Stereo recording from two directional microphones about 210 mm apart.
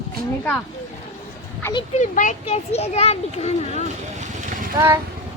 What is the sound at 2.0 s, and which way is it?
A child's voice, 35° left (ahead or behind).